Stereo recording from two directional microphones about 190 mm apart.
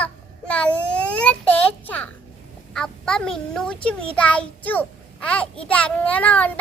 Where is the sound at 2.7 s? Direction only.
5° left (ahead or behind).